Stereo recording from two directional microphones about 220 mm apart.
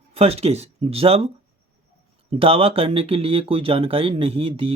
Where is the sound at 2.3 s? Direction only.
25° right (ahead or behind).